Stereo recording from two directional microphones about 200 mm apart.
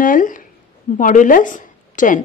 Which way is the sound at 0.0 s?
40° left (ahead or behind).